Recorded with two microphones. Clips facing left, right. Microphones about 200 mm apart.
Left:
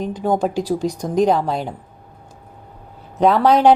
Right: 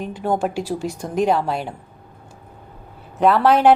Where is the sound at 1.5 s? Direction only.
5° right (ahead or behind).